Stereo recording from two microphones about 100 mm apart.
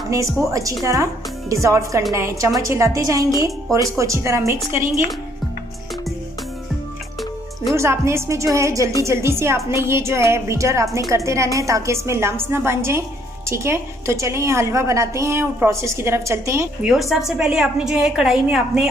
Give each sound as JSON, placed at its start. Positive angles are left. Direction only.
{"t": 0.5, "sound": "a woman's voice", "side_deg": -35}
{"t": 7.7, "sound": "a woman's voice", "side_deg": -30}
{"t": 16.8, "sound": "a woman's voice", "side_deg": 0}